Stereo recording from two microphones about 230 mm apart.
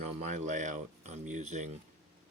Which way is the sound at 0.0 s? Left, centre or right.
Right.